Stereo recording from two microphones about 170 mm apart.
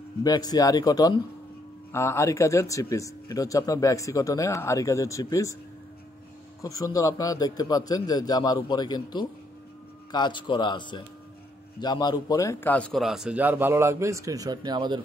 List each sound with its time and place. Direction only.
0.2 s speech: 20° left (ahead or behind)
6.6 s a man's voice: 20° left (ahead or behind); by 15.0 s 25° right (ahead or behind)